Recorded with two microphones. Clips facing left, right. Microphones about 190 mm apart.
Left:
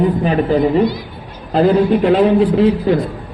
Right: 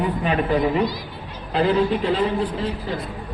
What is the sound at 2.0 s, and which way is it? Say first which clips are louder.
Speech: left 9 dB; 65° left (ahead or behind).